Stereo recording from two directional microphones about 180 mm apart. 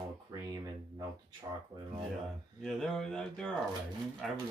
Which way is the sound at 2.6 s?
5° left (ahead or behind).